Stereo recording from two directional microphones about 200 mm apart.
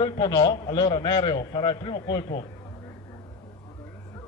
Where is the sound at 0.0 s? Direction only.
20° left (ahead or behind).